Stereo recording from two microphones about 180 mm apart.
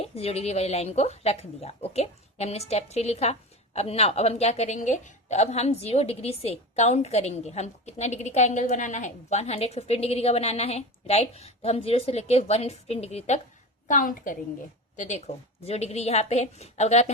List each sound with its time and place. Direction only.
0.0 s a woman's voice: 35° left (ahead or behind)